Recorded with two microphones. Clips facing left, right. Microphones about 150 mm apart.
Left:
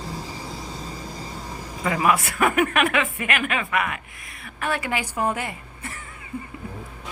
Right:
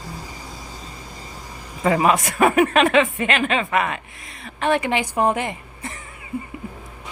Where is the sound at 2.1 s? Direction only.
20° right (ahead or behind).